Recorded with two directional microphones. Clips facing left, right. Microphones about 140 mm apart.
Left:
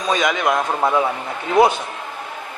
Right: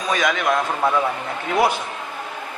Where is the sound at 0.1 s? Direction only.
20° left (ahead or behind).